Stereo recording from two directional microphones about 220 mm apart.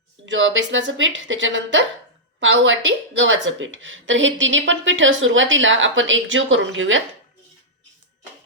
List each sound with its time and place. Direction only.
0.3 s a woman's voice: 60° right (ahead or behind)